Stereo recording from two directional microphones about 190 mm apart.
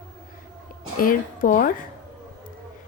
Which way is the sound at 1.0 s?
45° left (ahead or behind).